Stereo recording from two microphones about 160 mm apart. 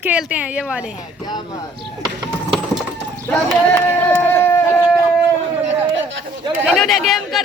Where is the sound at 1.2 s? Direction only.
25° left (ahead or behind).